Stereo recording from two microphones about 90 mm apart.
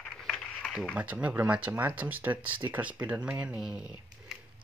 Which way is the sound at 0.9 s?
15° right (ahead or behind).